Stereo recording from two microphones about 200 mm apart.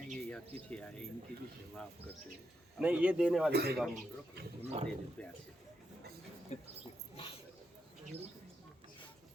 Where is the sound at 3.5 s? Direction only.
50° right (ahead or behind).